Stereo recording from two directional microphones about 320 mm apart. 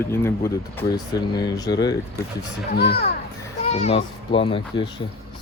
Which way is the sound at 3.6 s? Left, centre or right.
Centre.